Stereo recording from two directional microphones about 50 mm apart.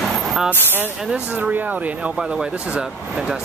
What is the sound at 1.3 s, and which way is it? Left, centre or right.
Speech, right.